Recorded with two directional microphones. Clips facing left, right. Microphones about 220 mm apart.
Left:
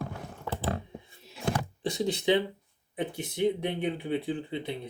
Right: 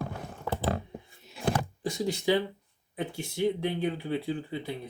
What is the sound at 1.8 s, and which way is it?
Speech, 20° left (ahead or behind).